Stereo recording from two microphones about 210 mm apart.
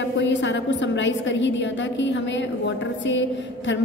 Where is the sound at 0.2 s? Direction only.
60° left (ahead or behind).